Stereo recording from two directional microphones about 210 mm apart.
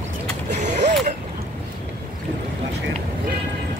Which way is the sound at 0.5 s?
35° right (ahead or behind).